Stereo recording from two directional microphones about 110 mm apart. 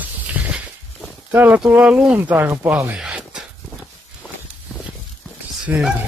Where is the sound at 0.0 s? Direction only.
15° right (ahead or behind).